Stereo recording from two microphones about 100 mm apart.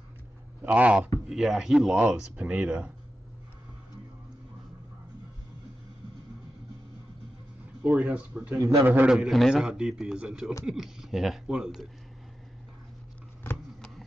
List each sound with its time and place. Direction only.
0.6 s a man's voice: 15° right (ahead or behind)
7.8 s a man's voice: 15° right (ahead or behind)
9.1 s a man's voice: centre (ahead or behind)
13.7 s a sound: 5° left (ahead or behind)